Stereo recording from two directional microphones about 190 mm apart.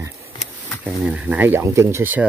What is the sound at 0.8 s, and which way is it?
Speech, 5° right (ahead or behind).